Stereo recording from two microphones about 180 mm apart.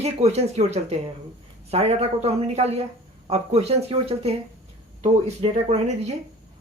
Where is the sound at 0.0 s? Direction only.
35° right (ahead or behind).